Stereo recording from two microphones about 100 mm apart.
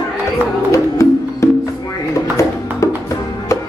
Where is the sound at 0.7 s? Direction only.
30° left (ahead or behind).